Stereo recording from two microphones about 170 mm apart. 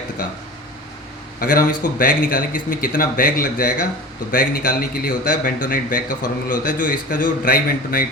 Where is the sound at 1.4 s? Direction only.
55° left (ahead or behind).